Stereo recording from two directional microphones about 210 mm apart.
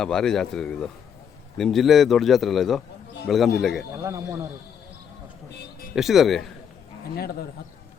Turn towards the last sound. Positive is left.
turn(degrees=45)  # may be behind; listen again after turning